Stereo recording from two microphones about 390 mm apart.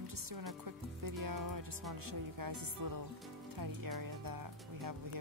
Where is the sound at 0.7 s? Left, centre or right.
Right.